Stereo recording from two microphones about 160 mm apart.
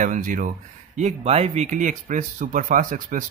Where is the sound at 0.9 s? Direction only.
45° right (ahead or behind).